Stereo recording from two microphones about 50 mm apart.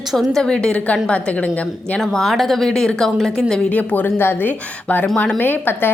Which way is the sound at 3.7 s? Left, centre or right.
Left.